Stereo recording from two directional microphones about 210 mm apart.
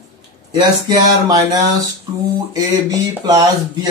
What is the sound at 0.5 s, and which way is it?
Speech, 20° right (ahead or behind).